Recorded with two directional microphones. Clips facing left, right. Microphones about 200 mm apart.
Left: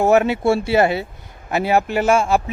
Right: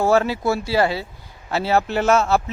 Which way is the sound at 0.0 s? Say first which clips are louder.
Left 3 dB; 20° left (ahead or behind).